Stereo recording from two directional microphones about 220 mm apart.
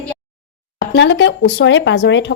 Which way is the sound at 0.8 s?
55° left (ahead or behind).